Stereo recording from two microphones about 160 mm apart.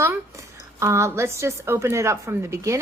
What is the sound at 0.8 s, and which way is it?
A woman's voice, 20° right (ahead or behind).